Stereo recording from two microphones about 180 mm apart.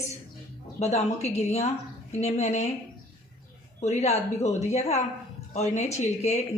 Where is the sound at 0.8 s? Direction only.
40° left (ahead or behind).